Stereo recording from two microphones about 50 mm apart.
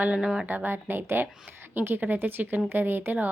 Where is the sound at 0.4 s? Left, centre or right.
Right.